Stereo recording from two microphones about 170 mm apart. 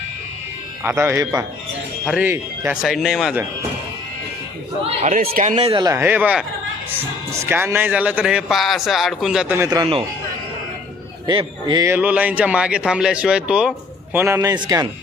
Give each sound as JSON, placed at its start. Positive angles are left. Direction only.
{"t": 0.9, "sound": "speech", "side_deg": -15}
{"t": 5.3, "sound": "speech", "side_deg": -45}
{"t": 9.6, "sound": "speech", "side_deg": -20}
{"t": 11.3, "sound": "speech", "side_deg": -25}
{"t": 11.9, "sound": "speech", "side_deg": -10}